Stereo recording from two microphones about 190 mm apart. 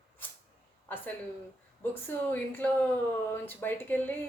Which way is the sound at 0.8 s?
10° left (ahead or behind).